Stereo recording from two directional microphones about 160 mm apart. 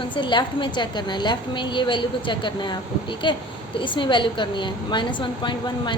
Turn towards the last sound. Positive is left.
turn(degrees=30)  # may be behind; listen again after turning